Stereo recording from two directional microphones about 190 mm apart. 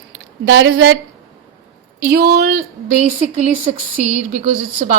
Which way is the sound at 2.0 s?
55° right (ahead or behind).